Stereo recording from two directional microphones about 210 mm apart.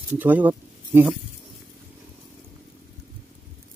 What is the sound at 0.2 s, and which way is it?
Speech, 10° right (ahead or behind).